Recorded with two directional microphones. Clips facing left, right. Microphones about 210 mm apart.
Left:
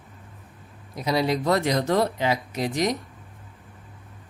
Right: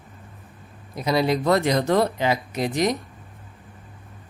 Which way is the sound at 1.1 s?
55° right (ahead or behind).